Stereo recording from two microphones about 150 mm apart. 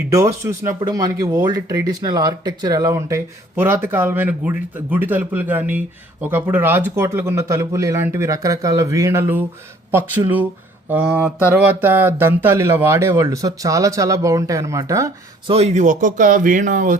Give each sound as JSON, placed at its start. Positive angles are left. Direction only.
{"t": 0.1, "sound": "speech", "side_deg": -20}
{"t": 15.4, "sound": "speech", "side_deg": -45}